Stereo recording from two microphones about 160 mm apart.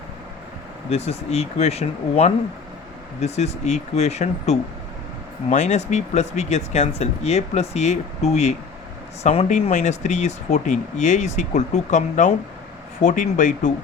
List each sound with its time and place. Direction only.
0.9 s speech: 40° left (ahead or behind)